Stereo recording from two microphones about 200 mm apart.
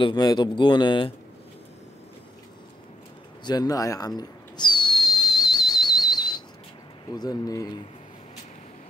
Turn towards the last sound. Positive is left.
turn(degrees=20)  # may be behind; listen again after turning